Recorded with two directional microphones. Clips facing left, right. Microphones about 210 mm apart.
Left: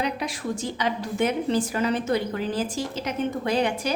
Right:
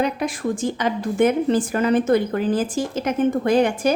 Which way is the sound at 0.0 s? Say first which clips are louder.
Right 6 dB; 50° right (ahead or behind).